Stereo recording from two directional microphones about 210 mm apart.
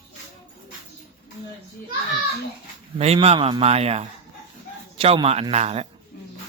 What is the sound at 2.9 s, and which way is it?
A man's voice, 30° right (ahead or behind).